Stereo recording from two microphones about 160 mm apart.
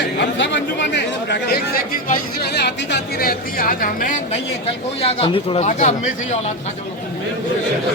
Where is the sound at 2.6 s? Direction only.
90° left; by 4.2 s 60° left (ahead or behind).